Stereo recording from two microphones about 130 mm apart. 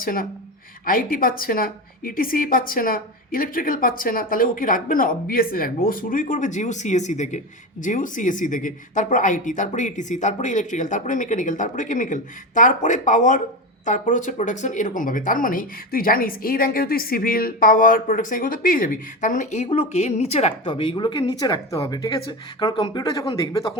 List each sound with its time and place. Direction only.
0.0 s a woman's voice: 90° left; by 23.7 s 25° left (ahead or behind)